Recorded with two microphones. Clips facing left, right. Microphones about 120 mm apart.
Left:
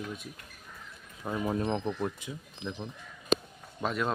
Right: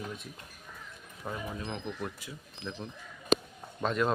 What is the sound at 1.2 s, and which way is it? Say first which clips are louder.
Speech: left 4 dB; 10° left (ahead or behind).